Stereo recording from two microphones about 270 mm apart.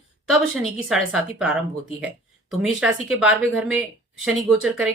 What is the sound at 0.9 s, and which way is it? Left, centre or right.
Speech, centre.